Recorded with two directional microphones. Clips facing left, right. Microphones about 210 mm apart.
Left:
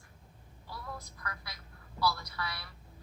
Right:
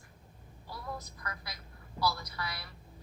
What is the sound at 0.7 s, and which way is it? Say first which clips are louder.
Speech: right 2 dB; 20° right (ahead or behind).